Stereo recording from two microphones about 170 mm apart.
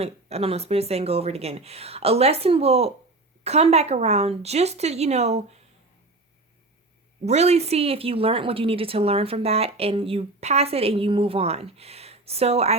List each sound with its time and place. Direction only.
0.0 s a woman's voice: 40° right (ahead or behind)
7.3 s a woman's voice: 40° right (ahead or behind)